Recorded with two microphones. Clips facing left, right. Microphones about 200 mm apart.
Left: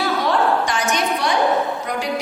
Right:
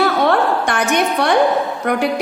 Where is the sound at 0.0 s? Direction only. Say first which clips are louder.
Right 4 dB; 60° right (ahead or behind).